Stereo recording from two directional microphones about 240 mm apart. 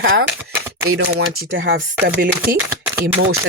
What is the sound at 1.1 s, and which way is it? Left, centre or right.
Speech, right.